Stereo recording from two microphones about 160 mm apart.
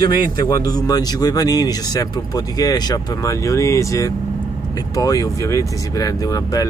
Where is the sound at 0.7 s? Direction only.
25° left (ahead or behind).